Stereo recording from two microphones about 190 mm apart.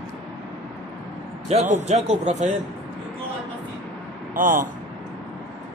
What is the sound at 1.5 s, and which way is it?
Speech, 35° right (ahead or behind).